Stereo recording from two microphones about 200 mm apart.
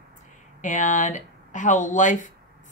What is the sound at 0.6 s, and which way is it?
Speech, 40° left (ahead or behind).